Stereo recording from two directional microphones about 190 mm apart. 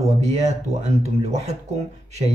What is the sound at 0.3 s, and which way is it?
Speech, 35° right (ahead or behind).